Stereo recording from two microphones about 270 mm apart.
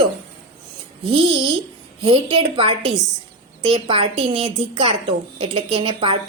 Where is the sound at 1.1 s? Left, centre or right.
Centre.